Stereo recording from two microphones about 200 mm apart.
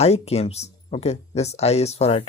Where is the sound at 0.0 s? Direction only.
30° left (ahead or behind).